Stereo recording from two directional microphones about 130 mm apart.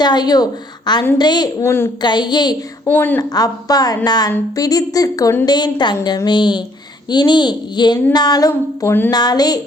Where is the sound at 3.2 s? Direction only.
30° left (ahead or behind).